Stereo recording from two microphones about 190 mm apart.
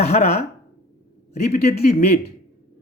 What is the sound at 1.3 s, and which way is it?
Speech, 35° left (ahead or behind).